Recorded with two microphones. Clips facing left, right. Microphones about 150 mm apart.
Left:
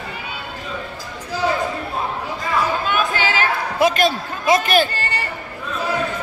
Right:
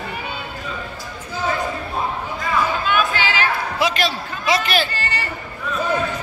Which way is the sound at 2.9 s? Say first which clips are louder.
Even; 45° left (ahead or behind).